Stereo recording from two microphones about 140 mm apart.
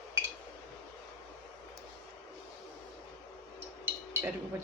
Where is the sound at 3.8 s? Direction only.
15° right (ahead or behind).